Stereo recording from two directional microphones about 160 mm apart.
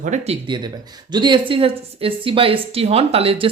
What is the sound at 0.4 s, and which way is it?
Speech, 30° right (ahead or behind).